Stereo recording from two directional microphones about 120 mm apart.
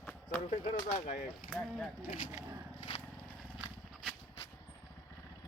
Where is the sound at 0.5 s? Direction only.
70° left (ahead or behind).